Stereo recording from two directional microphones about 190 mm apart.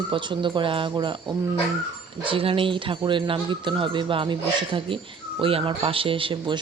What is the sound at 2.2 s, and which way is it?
Speech, 30° right (ahead or behind).